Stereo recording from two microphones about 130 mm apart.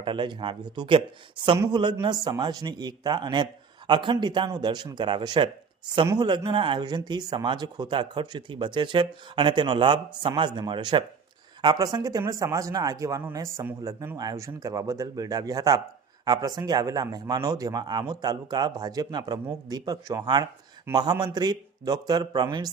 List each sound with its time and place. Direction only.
0.0 s speech: 40° right (ahead or behind); by 14.2 s 15° right (ahead or behind)
14.2 s speech: 25° right (ahead or behind)